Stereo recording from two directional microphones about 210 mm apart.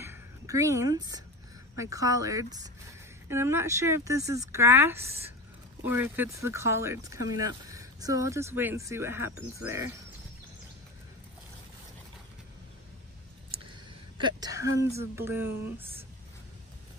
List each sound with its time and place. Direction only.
0.0 s a sound: 15° right (ahead or behind)
1.8 s speech: 15° right (ahead or behind)
14.1 s a woman's voice: 20° right (ahead or behind)